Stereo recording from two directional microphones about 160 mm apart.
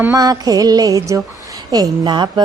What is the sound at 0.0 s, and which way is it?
Music, 20° right (ahead or behind).